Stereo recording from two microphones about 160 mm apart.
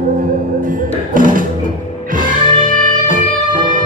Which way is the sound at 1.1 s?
60° right (ahead or behind).